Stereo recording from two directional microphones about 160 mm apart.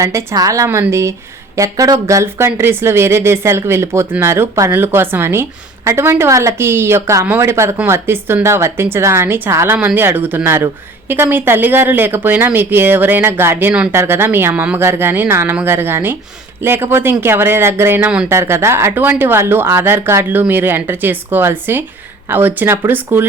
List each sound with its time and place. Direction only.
0.0 s speech: 20° right (ahead or behind)